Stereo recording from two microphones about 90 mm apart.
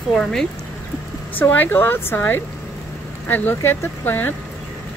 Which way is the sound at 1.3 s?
20° left (ahead or behind).